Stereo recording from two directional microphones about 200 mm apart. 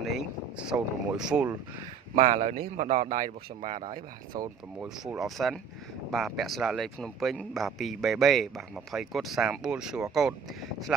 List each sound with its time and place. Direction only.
0.0 s speech: centre (ahead or behind)
2.1 s a man's voice: 40° right (ahead or behind)
4.3 s speech: 20° right (ahead or behind)
4.8 s a man's voice: centre (ahead or behind)